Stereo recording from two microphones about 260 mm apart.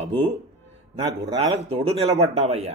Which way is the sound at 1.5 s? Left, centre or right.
Right.